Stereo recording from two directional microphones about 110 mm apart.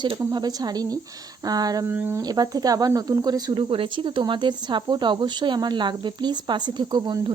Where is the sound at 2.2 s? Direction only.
35° right (ahead or behind).